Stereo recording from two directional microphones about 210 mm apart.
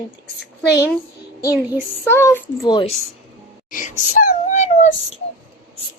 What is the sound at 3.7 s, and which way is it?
Speech, 40° left (ahead or behind).